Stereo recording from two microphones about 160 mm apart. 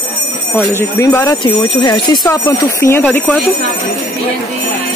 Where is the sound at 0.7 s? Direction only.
15° left (ahead or behind).